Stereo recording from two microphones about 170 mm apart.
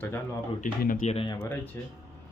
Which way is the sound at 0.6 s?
50° left (ahead or behind).